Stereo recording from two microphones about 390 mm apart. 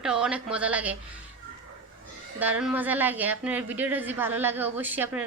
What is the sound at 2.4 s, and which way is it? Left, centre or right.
A woman's voice, centre.